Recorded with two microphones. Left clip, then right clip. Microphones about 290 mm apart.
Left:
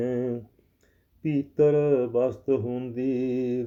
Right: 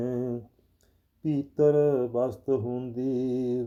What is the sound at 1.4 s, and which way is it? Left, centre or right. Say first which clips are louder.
Mantra: left 1 dB; right.